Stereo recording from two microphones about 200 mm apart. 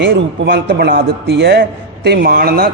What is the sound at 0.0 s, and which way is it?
A man's voice, 60° right (ahead or behind).